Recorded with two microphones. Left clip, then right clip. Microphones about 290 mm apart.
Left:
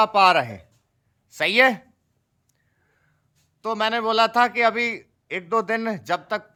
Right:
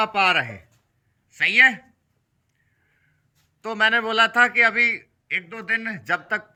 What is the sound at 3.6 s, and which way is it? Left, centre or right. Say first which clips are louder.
A man's voice: right 3 dB; centre.